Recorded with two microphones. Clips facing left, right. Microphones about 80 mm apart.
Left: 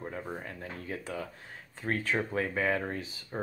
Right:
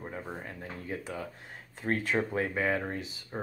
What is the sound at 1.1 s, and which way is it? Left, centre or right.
Speech, centre.